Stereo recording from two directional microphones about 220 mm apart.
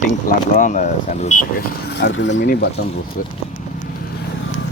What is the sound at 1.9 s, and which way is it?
Speech, 55° left (ahead or behind).